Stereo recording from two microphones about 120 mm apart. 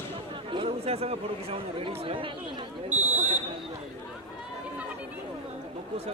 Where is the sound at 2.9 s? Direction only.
15° right (ahead or behind).